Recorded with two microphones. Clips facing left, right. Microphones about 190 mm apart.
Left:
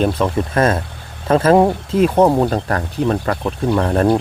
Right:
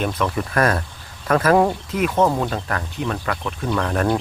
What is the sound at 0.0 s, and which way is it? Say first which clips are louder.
Speech: left 6 dB; 30° left (ahead or behind).